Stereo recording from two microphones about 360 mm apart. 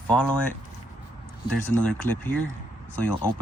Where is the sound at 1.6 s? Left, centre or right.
Centre.